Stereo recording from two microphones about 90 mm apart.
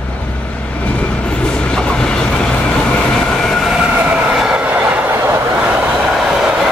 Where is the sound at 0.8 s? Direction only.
15° left (ahead or behind).